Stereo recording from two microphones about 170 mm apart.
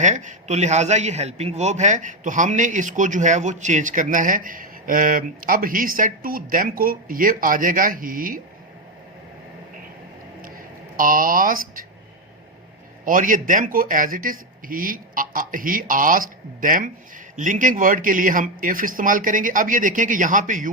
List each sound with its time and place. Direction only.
0.0 s a man's voice: 45° right (ahead or behind)
10.9 s speech: 55° right (ahead or behind)
13.1 s a man's voice: 50° right (ahead or behind)